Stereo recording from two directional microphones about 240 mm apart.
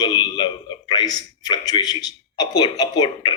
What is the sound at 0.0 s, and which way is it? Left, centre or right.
A man's voice, centre.